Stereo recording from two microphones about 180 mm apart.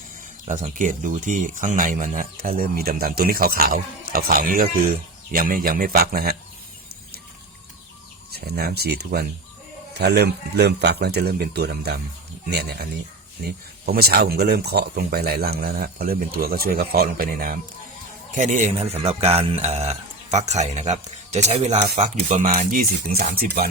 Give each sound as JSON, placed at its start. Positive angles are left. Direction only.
{"t": 0.4, "sound": "speech", "side_deg": -45}
{"t": 8.3, "sound": "speech", "side_deg": -60}